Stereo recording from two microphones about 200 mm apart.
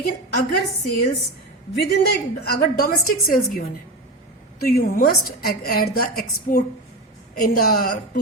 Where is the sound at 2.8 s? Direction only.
50° left (ahead or behind).